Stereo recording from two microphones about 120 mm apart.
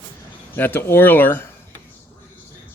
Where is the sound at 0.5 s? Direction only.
15° left (ahead or behind).